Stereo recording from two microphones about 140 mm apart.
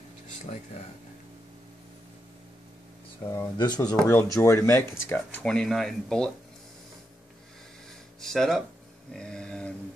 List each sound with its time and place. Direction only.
3.3 s speech: 30° left (ahead or behind)
3.9 s speech: 5° left (ahead or behind)
4.2 s speech: 20° left (ahead or behind); by 6.3 s 5° left (ahead or behind)
8.2 s speech: 5° left (ahead or behind)
9.1 s a sound: 5° left (ahead or behind)